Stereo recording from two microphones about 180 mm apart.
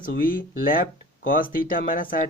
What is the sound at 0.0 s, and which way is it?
Speech, 50° left (ahead or behind).